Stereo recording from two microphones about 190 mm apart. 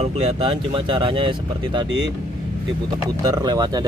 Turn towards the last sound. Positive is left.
turn(degrees=-20)  # may be behind; listen again after turning